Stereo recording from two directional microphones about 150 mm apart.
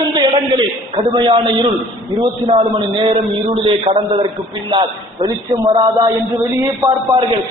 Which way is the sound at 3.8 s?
40° right (ahead or behind).